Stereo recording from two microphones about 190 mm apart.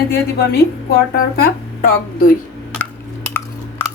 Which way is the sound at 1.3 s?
50° left (ahead or behind).